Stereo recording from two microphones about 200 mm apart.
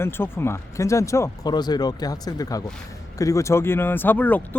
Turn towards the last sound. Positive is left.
turn(degrees=10)  # may be behind; listen again after turning